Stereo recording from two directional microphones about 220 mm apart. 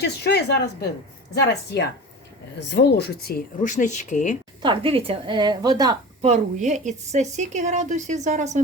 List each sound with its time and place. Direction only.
0.0 s speech: 50° left (ahead or behind); by 4.4 s 35° left (ahead or behind)
4.6 s a woman's voice: 25° right (ahead or behind)
6.2 s a woman's voice: 35° right (ahead or behind)